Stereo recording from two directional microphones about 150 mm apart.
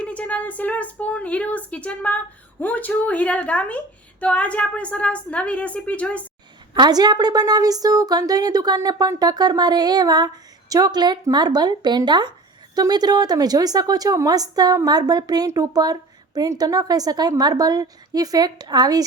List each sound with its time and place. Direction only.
0.0 s a woman's voice: 10° left (ahead or behind)
6.7 s a woman's voice: 30° right (ahead or behind)